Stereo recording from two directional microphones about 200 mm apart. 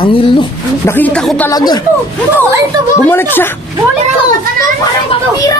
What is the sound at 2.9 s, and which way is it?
Speech, 10° left (ahead or behind).